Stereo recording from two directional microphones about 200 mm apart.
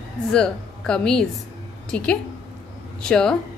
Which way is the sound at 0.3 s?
5° left (ahead or behind).